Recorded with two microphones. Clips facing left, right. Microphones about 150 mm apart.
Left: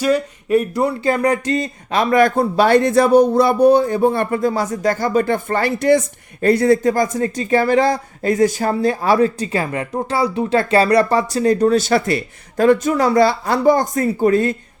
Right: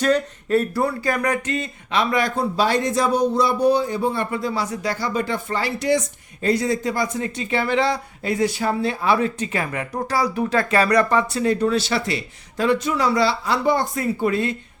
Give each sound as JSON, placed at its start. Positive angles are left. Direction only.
{"t": 0.0, "sound": "speech", "side_deg": 10}